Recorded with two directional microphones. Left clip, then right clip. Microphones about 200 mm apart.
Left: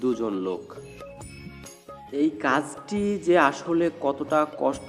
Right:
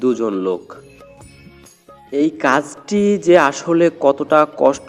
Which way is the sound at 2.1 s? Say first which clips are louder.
Right 8 dB; 35° right (ahead or behind).